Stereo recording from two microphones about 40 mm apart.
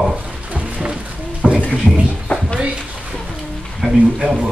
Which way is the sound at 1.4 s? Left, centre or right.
Centre.